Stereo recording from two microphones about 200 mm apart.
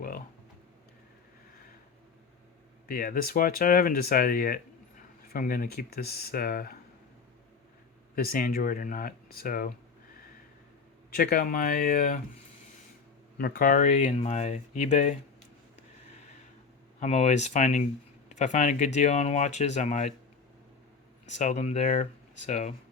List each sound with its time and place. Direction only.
2.8 s speech: 45° left (ahead or behind)
8.1 s speech: 45° left (ahead or behind)
11.1 s speech: 50° left (ahead or behind)
13.4 s speech: 45° left (ahead or behind)
17.0 s speech: 35° left (ahead or behind)
21.3 s speech: 35° left (ahead or behind)